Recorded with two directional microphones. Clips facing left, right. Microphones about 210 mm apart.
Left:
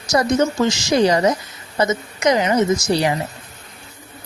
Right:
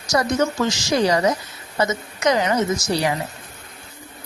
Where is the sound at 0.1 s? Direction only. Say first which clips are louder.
Left 3 dB; 20° left (ahead or behind).